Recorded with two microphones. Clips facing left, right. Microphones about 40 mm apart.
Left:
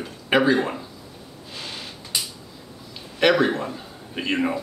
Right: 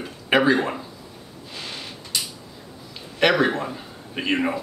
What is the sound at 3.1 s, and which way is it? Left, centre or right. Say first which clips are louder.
A man's voice: even; centre.